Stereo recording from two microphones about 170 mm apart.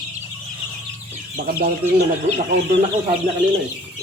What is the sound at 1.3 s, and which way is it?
Speech, 60° right (ahead or behind).